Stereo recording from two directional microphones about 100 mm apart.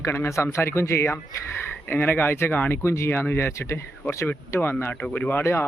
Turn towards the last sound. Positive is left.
turn(degrees=25)  # may be behind; listen again after turning